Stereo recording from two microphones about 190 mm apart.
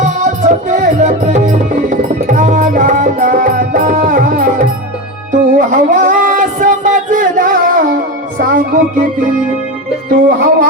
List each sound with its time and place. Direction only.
0.3 s music: 40° right (ahead or behind)
10.2 s music: 45° right (ahead or behind)